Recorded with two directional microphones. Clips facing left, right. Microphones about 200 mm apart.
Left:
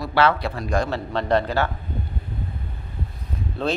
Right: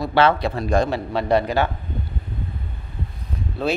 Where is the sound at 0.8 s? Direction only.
10° right (ahead or behind).